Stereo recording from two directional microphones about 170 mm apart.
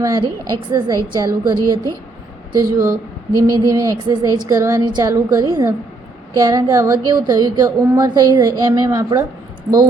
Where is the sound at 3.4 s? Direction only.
20° right (ahead or behind).